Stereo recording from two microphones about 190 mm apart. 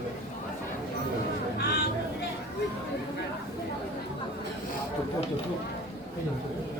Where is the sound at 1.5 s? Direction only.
60° left (ahead or behind).